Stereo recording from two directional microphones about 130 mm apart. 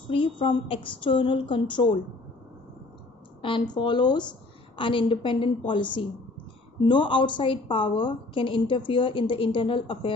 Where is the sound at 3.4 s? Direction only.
40° left (ahead or behind).